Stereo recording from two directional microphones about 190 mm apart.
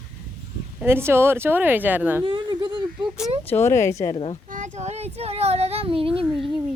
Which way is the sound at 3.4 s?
10° left (ahead or behind).